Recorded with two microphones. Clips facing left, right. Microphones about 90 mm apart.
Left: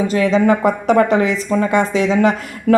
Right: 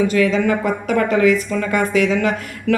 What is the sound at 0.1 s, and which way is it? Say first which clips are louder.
A woman's voice: left 2 dB; 30° left (ahead or behind).